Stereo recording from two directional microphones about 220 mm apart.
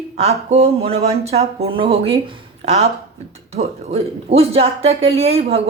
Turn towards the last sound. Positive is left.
turn(degrees=-25)  # may be behind; listen again after turning